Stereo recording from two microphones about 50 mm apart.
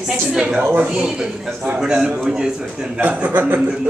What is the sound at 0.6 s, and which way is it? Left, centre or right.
Speech, right.